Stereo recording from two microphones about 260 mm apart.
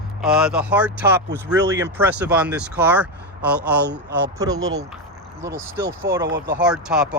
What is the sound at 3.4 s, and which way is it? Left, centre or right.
Speech, right.